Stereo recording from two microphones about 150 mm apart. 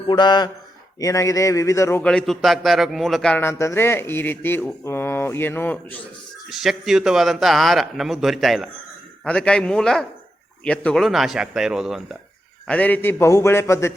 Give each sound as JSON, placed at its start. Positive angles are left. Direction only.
{"t": 0.1, "sound": "speech", "side_deg": 30}
{"t": 2.0, "sound": "a man's voice", "side_deg": 5}
{"t": 3.4, "sound": "speech", "side_deg": 15}
{"t": 6.5, "sound": "a man's voice", "side_deg": 0}
{"t": 12.6, "sound": "speech", "side_deg": 10}